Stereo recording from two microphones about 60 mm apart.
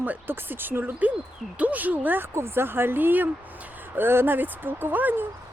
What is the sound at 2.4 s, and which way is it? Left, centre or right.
Speech, right.